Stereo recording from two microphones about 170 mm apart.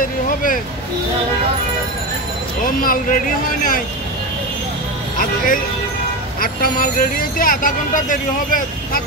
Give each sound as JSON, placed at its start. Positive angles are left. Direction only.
{"t": 2.8, "sound": "speech", "side_deg": 55}
{"t": 5.1, "sound": "speech", "side_deg": 50}